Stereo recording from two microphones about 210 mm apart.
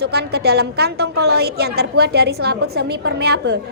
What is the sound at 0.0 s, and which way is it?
A woman's voice, 50° right (ahead or behind).